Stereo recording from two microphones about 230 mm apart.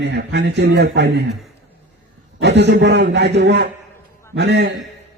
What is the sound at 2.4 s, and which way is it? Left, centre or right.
A man's voice, right.